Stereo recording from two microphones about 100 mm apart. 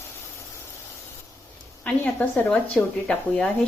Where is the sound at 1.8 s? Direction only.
15° left (ahead or behind).